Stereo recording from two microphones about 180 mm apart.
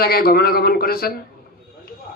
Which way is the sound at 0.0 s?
55° left (ahead or behind).